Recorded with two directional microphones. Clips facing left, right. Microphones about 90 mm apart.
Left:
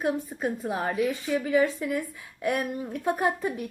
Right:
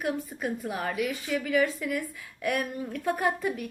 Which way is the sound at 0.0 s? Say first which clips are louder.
Left 3 dB; 25° left (ahead or behind).